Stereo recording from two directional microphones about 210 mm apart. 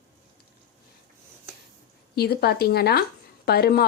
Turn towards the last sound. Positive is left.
turn(degrees=45)  # may be behind; listen again after turning